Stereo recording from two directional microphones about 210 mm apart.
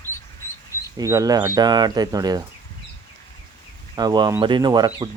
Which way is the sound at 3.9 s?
20° right (ahead or behind).